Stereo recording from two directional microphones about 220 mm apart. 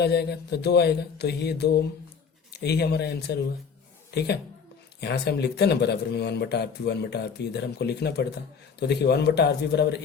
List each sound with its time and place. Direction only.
0.0 s speech: 50° left (ahead or behind)
4.9 s speech: 50° left (ahead or behind)